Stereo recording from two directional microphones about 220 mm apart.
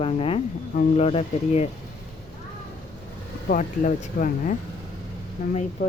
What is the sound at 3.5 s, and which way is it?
Speech, 35° left (ahead or behind).